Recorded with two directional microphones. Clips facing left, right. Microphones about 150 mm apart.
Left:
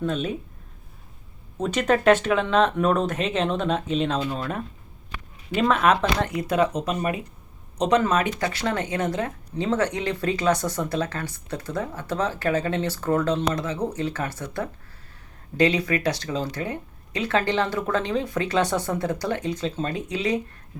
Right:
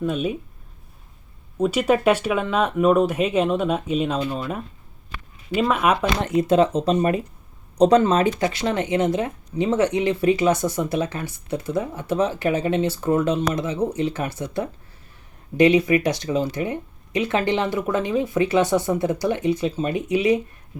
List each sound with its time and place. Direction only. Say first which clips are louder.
0.0 s speech: right 2 dB; 10° right (ahead or behind)
1.5 s speech: right 3 dB; 10° right (ahead or behind)
5.1 s a sound: right 1 dB; 15° left (ahead or behind)
5.5 s speech: even; 10° right (ahead or behind)
6.2 s speech: right 5 dB; 25° right (ahead or behind)